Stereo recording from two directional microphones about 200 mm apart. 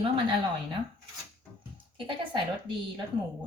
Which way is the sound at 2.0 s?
25° right (ahead or behind).